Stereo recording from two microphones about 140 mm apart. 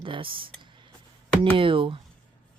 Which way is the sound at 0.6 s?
35° right (ahead or behind).